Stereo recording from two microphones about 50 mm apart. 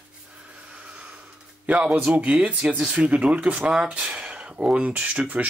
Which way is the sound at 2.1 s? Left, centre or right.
Right.